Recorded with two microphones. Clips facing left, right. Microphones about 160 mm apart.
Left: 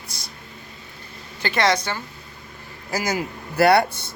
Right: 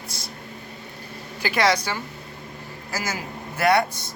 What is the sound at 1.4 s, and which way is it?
Speech, 5° right (ahead or behind).